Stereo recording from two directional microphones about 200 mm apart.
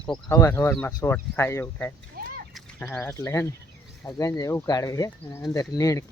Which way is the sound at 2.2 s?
45° right (ahead or behind).